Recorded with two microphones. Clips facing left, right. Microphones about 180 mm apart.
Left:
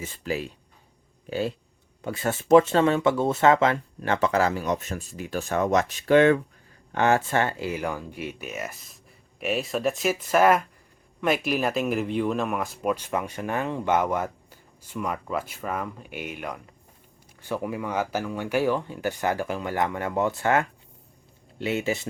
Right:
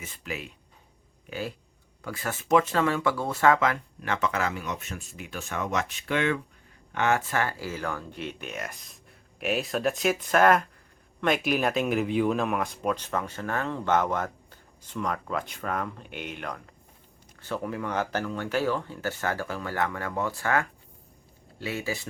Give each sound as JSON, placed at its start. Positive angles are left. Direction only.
{"t": 0.0, "sound": "speech", "side_deg": 30}